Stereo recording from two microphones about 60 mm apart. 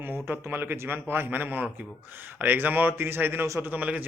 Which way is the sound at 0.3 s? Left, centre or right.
Right.